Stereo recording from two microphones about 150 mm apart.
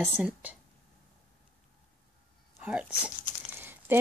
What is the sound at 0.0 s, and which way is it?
Speech, 10° right (ahead or behind).